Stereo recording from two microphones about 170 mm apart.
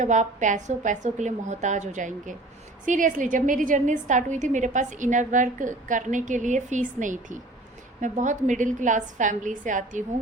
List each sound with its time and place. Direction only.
0.0 s a woman's voice: 45° right (ahead or behind)